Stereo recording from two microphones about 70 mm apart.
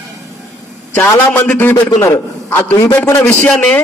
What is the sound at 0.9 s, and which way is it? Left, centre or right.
A man's voice, left.